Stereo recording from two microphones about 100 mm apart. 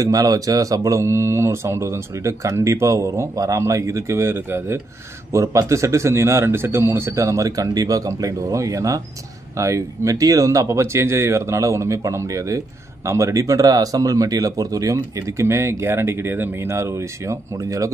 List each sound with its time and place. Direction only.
0.0 s speech: 35° right (ahead or behind)